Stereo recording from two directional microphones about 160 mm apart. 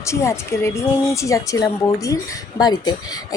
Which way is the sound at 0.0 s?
20° left (ahead or behind).